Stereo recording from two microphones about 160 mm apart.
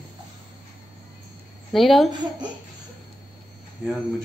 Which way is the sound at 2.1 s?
25° right (ahead or behind).